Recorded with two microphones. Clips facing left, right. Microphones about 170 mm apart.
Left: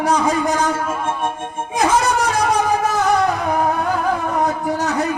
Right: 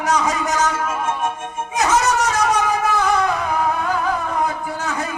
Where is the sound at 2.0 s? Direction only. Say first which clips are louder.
Left 1 dB; 30° left (ahead or behind).